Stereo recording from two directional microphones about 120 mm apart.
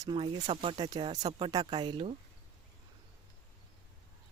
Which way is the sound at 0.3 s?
70° right (ahead or behind).